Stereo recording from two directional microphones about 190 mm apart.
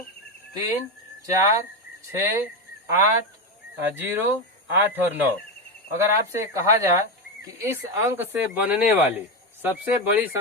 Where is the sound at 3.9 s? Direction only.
10° right (ahead or behind).